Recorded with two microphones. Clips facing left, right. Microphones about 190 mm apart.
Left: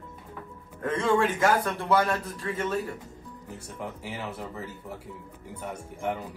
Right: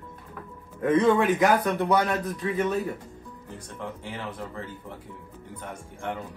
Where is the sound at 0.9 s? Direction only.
20° right (ahead or behind).